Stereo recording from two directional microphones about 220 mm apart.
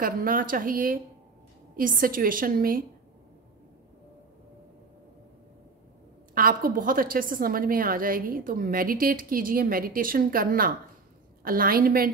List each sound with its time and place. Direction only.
0.0 s a woman's voice: 40° right (ahead or behind)
6.3 s a woman's voice: 40° right (ahead or behind)